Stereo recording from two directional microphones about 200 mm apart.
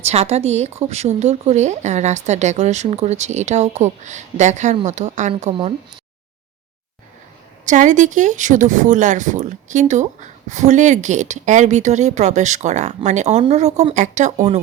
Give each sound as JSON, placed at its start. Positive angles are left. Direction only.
{"t": 0.0, "sound": "speech", "side_deg": -30}
{"t": 7.6, "sound": "speech", "side_deg": -40}